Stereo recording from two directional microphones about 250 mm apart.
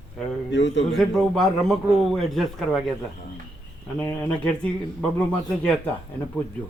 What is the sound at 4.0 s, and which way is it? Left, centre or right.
A man's voice, centre.